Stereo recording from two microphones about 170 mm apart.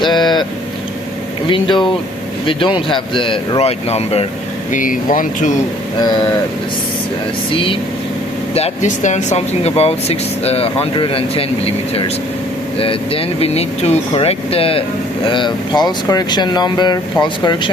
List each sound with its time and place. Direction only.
0.0 s vehicle: 25° left (ahead or behind)
1.5 s speech: 30° left (ahead or behind)
4.7 s speech: 50° left (ahead or behind)
7.5 s speech: 30° left (ahead or behind)
8.5 s speech: 40° left (ahead or behind)